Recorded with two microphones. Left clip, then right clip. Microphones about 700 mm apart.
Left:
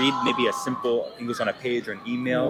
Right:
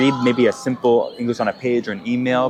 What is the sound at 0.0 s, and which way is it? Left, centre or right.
Speech, right.